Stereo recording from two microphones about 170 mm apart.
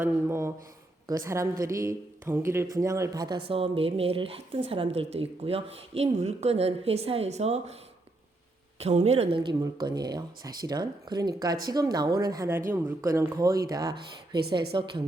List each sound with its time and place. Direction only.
0.0 s a woman's voice: 15° right (ahead or behind); by 7.8 s 40° right (ahead or behind)
8.8 s a woman's voice: 40° right (ahead or behind)
9.6 s speech: 25° right (ahead or behind)
13.9 s speech: 70° right (ahead or behind)
14.7 s speech: 30° right (ahead or behind)